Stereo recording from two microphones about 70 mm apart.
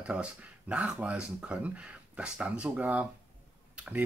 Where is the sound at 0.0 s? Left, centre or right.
Centre.